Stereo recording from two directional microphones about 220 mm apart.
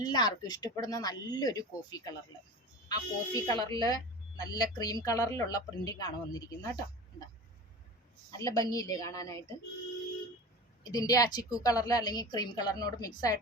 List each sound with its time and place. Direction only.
0.0 s speech: 20° left (ahead or behind)
8.4 s speech: 15° left (ahead or behind)
10.8 s speech: 15° left (ahead or behind)